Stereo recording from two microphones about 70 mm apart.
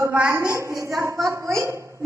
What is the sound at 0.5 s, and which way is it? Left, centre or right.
A woman's voice, right.